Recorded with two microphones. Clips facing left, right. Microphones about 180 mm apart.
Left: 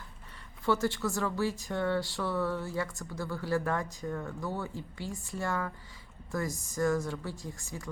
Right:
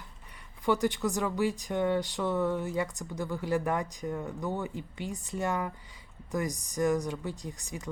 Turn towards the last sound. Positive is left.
turn(degrees=-15)  # may be behind; listen again after turning